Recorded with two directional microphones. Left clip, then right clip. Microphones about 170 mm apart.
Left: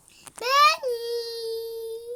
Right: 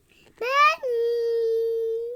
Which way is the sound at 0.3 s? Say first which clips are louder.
Left 1 dB; 50° left (ahead or behind).